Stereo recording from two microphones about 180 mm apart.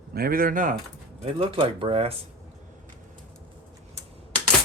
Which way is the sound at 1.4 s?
30° right (ahead or behind).